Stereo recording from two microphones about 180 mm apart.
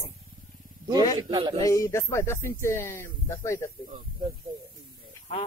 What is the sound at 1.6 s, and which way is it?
Speech, 15° left (ahead or behind).